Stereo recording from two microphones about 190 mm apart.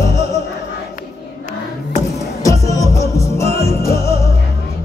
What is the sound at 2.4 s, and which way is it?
Music, 15° left (ahead or behind).